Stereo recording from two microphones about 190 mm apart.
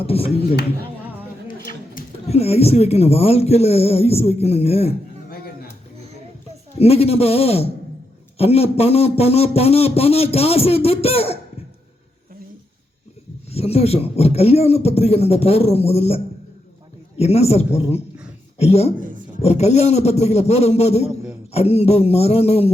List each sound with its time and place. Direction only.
0.0 s speech: 30° left (ahead or behind)
1.5 s a sound: 45° left (ahead or behind)
2.3 s speech: 35° left (ahead or behind)
6.7 s speech: 30° left (ahead or behind)
13.5 s speech: 30° left (ahead or behind)
18.9 s a sound: 45° right (ahead or behind)
19.4 s speech: 35° left (ahead or behind)